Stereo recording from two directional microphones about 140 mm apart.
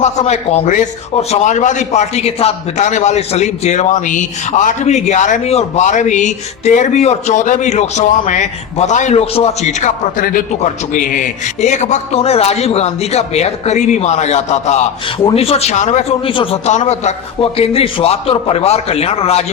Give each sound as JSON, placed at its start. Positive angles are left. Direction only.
{"t": 0.0, "sound": "a man's voice", "side_deg": 55}
{"t": 10.6, "sound": "a man's voice", "side_deg": 70}